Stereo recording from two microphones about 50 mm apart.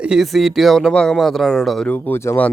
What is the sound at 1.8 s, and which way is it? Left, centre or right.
Speech, left.